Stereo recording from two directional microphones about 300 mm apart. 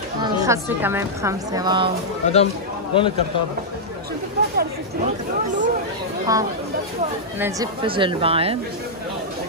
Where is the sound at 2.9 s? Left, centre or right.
Centre.